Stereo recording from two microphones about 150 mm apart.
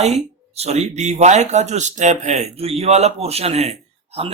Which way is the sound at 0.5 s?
45° right (ahead or behind).